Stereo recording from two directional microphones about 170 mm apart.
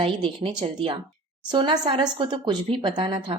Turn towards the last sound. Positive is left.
turn(degrees=-30)  # may be behind; listen again after turning